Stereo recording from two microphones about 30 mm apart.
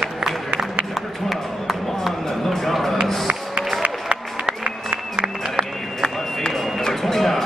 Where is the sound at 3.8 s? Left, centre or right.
Right.